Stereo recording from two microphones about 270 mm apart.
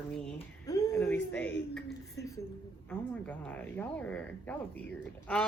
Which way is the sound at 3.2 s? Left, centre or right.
Centre.